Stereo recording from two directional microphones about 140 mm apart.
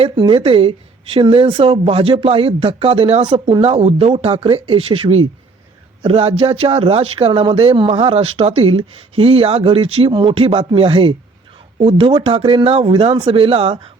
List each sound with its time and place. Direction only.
0.2 s speech: 40° right (ahead or behind)